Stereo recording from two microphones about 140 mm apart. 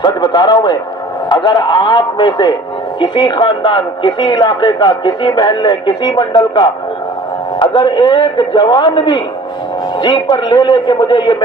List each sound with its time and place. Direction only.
0.0 s speech: 30° left (ahead or behind)